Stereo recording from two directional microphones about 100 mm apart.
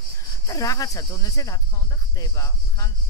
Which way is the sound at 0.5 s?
35° left (ahead or behind).